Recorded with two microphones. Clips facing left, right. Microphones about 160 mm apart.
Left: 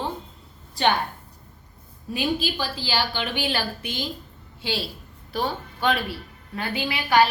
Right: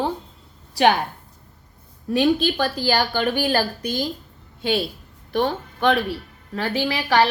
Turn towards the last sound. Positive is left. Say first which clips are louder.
# right 1 dB
turn(degrees=-85)